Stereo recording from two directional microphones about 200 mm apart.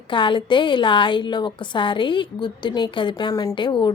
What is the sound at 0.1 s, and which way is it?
A woman's voice, 25° left (ahead or behind).